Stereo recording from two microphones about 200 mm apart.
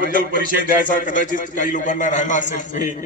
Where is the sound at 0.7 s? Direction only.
40° left (ahead or behind).